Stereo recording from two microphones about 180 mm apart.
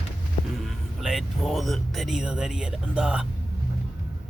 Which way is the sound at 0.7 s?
Centre (ahead or behind).